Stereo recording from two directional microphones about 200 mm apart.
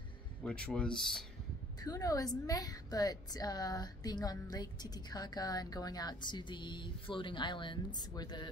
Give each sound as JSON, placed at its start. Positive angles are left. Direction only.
{"t": 0.4, "sound": "speech", "side_deg": 5}
{"t": 1.8, "sound": "a woman's voice", "side_deg": 20}